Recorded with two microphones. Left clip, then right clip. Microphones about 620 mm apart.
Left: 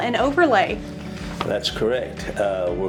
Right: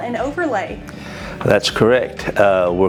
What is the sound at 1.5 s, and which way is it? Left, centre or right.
Speech, right.